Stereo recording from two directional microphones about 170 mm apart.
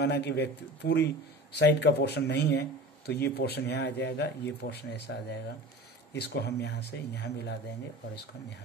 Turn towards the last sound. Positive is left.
turn(degrees=85)